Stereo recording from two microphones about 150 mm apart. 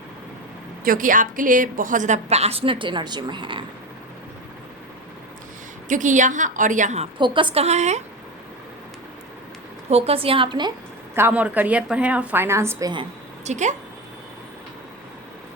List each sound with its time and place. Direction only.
0.9 s a woman's voice: 65° right (ahead or behind); by 3.6 s 30° right (ahead or behind)
5.9 s a woman's voice: 55° right (ahead or behind)
7.2 s a woman's voice: 30° right (ahead or behind); by 8.0 s 50° right (ahead or behind)
9.9 s a woman's voice: 40° right (ahead or behind)
11.1 s a woman's voice: 10° right (ahead or behind)
13.4 s a woman's voice: 50° right (ahead or behind)